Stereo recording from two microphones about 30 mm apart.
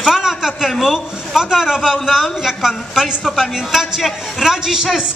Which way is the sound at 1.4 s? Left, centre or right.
Right.